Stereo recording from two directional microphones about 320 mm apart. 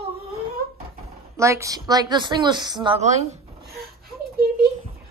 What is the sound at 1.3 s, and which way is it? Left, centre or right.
A woman's voice, centre.